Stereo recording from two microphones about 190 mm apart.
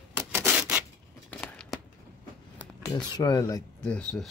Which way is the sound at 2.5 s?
20° left (ahead or behind).